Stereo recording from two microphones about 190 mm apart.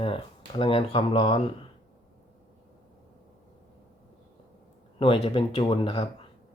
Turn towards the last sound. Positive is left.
turn(degrees=25)  # may be behind; listen again after turning